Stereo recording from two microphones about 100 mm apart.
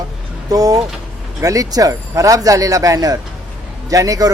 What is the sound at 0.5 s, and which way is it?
Speech, 40° right (ahead or behind).